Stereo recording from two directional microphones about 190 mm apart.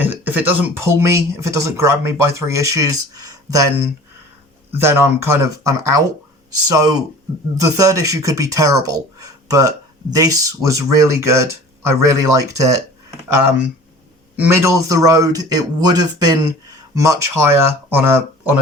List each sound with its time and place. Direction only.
0.0 s a man's voice: 10° right (ahead or behind)
4.7 s a man's voice: 10° right (ahead or behind)
14.3 s a man's voice: 10° right (ahead or behind)